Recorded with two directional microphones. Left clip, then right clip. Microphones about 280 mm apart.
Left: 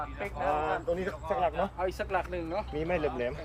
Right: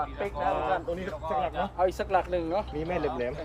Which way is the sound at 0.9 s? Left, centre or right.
Centre.